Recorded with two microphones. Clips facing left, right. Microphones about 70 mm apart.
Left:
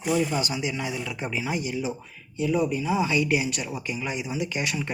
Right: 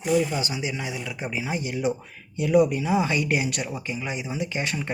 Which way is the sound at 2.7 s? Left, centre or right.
Right.